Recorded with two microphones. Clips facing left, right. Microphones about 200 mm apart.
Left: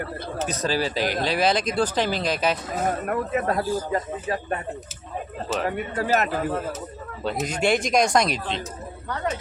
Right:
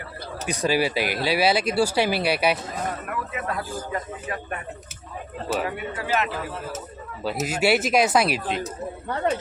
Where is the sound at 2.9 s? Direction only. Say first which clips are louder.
Left 6 dB; 45° left (ahead or behind).